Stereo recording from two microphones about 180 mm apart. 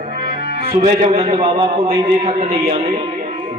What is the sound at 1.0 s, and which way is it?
A man's voice, 30° right (ahead or behind).